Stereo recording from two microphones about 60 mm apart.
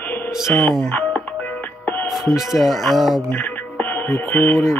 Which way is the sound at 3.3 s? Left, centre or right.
Left.